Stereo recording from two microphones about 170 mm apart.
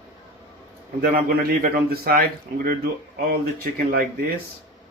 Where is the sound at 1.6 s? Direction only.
60° right (ahead or behind).